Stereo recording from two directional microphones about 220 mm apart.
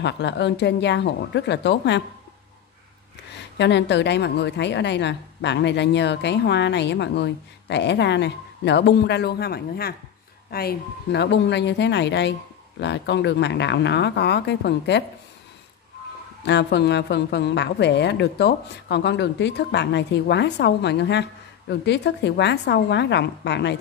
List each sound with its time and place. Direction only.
0.0 s a woman's voice: 50° left (ahead or behind)
3.5 s a woman's voice: 50° left (ahead or behind)
16.4 s a woman's voice: 50° left (ahead or behind)